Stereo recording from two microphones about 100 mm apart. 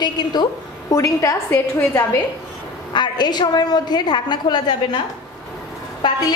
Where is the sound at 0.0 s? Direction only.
45° left (ahead or behind).